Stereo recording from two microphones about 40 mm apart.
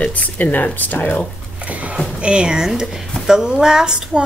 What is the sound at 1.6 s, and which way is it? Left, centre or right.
Speech, right.